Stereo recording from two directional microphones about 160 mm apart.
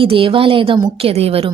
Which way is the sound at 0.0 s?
35° right (ahead or behind).